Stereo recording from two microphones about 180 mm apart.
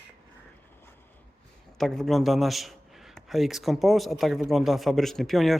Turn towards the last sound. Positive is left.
turn(degrees=0)  # may be behind; listen again after turning